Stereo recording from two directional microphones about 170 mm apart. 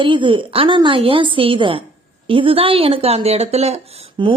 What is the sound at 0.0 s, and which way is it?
A woman's voice, 30° right (ahead or behind).